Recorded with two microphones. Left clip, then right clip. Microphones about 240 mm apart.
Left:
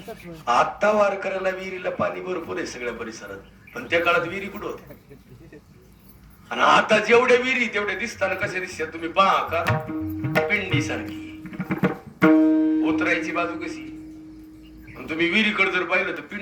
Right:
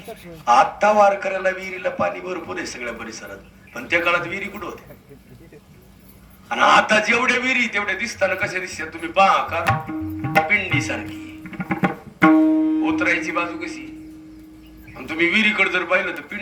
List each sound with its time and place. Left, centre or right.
0.4 s a man's voice: right
6.5 s a man's voice: right
14.9 s a sound: right
15.3 s a man's voice: right